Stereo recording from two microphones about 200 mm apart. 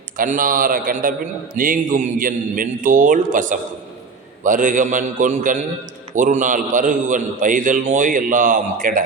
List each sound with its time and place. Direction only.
0.2 s a man's voice: 45° right (ahead or behind)